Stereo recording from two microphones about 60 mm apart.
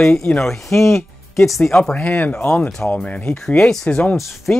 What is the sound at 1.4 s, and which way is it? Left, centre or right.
Speech, centre.